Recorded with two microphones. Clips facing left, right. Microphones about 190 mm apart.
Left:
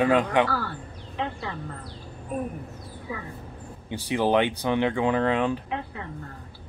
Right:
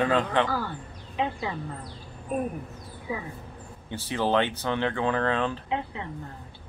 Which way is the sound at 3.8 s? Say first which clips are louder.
Left 3 dB; 15° left (ahead or behind).